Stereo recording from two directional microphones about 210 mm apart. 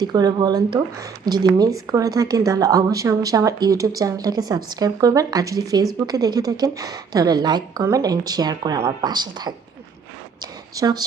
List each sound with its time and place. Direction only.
0.0 s a woman's voice: 20° right (ahead or behind)